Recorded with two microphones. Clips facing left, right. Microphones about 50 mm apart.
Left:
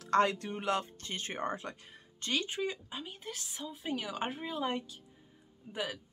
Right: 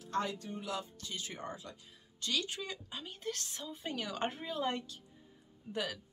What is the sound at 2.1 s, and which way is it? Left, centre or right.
Speech, left.